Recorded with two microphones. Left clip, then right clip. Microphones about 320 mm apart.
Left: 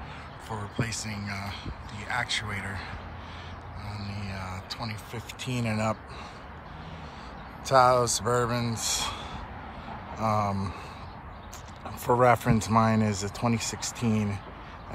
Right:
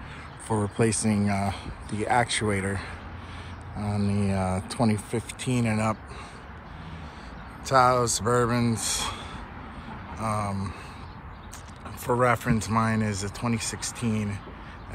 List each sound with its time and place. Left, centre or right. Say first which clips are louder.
0.5 s speech: right 9 dB; centre
7.6 s speech: even; centre
10.1 s speech: left 3 dB; centre
12.1 s speech: left 2 dB; centre